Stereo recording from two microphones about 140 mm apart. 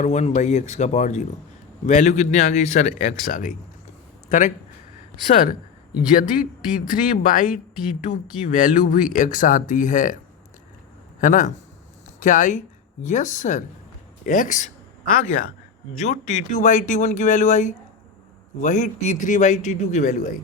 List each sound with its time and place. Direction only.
0.0 s speech: 55° left (ahead or behind)
11.2 s speech: 65° left (ahead or behind)
16.0 s speech: 55° left (ahead or behind)